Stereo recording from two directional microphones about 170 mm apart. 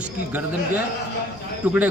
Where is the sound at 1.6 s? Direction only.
10° right (ahead or behind).